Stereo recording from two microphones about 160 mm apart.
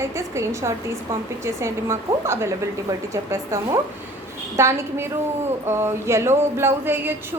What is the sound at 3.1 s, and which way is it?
Speech, 20° right (ahead or behind).